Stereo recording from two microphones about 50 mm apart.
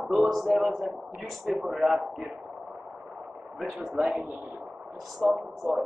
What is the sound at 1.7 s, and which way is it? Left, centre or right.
Speech, centre.